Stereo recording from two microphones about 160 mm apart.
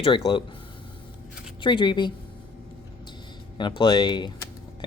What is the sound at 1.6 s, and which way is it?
Speech, 30° left (ahead or behind).